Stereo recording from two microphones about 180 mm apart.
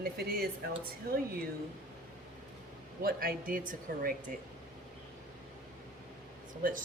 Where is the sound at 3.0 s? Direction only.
55° right (ahead or behind).